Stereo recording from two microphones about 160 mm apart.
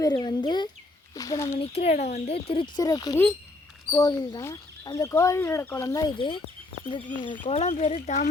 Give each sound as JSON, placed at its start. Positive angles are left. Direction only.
{"t": 0.0, "sound": "speech", "side_deg": 25}
{"t": 1.5, "sound": "speech", "side_deg": 40}